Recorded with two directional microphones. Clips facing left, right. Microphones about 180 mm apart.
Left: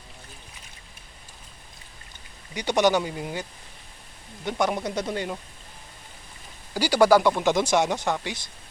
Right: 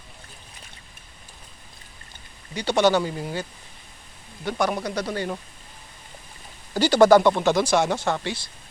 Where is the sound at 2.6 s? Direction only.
15° left (ahead or behind).